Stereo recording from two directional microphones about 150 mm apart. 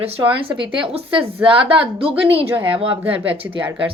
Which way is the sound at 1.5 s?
35° right (ahead or behind).